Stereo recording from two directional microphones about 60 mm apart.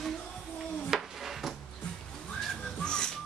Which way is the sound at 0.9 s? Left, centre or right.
Centre.